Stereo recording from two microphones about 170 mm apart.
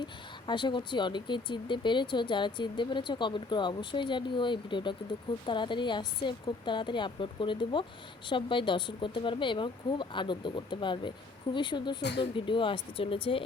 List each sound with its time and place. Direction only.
0.0 s speech: 25° left (ahead or behind)